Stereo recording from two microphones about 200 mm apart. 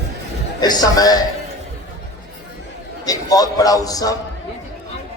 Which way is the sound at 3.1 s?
20° left (ahead or behind).